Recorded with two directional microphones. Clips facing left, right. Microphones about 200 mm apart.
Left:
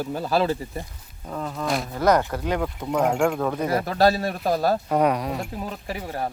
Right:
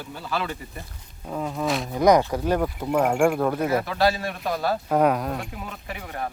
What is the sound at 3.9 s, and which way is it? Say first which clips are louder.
Speech: left 3 dB; 40° left (ahead or behind).